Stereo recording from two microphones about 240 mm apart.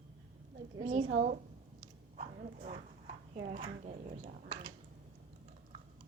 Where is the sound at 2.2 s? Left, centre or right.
Right.